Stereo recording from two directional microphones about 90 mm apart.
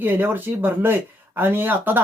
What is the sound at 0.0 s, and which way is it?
Speech, 20° right (ahead or behind).